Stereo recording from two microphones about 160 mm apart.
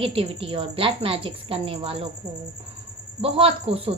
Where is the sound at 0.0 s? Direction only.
35° right (ahead or behind).